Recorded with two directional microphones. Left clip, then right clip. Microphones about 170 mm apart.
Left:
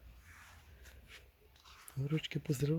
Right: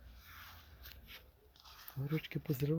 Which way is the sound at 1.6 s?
60° right (ahead or behind).